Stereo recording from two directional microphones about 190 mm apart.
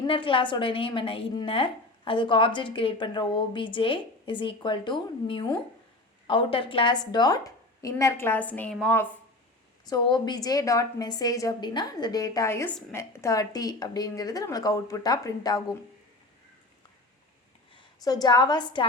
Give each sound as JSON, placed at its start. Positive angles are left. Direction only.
{"t": 0.1, "sound": "a woman's voice", "side_deg": 25}
{"t": 9.8, "sound": "a woman's voice", "side_deg": 20}
{"t": 17.7, "sound": "a woman's voice", "side_deg": 20}